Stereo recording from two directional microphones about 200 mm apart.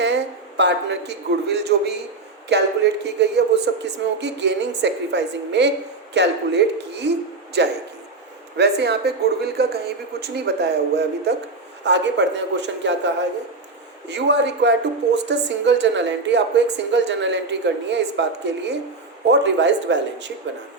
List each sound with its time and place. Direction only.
0.0 s a man's voice: 60° right (ahead or behind)
14.1 s a woman's voice: 60° right (ahead or behind)